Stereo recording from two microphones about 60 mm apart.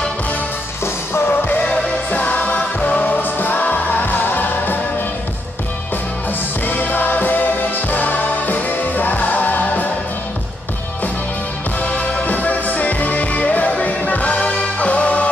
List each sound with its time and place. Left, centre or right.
1.1 s music: left
1.6 s music: centre
6.6 s music: left
11.8 s music: centre